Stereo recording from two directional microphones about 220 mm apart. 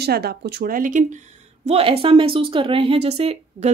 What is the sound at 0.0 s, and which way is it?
Speech, 45° right (ahead or behind).